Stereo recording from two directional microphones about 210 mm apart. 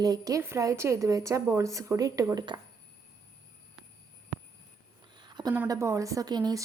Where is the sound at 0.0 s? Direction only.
15° right (ahead or behind).